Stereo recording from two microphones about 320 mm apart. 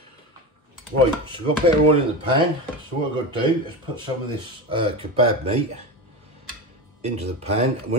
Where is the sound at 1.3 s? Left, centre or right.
Centre.